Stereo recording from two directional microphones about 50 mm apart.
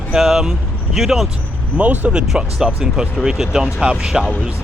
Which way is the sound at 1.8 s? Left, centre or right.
Right.